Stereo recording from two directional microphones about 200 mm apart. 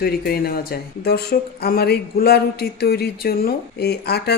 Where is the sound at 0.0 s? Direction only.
50° left (ahead or behind).